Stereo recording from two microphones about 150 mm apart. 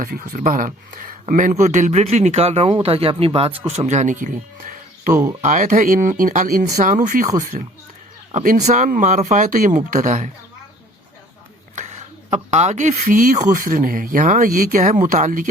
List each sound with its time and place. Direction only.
0.0 s speech: 60° right (ahead or behind)
11.7 s speech: 50° right (ahead or behind)